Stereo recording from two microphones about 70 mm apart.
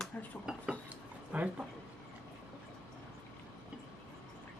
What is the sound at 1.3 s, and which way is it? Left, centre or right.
Speech, centre.